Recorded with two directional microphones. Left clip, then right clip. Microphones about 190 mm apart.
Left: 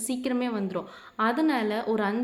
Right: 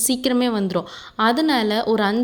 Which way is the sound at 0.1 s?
40° right (ahead or behind).